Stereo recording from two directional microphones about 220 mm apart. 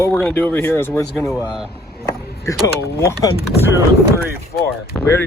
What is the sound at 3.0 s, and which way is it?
Speech, 15° left (ahead or behind).